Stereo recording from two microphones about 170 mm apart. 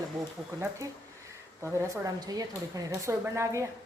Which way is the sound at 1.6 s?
20° right (ahead or behind).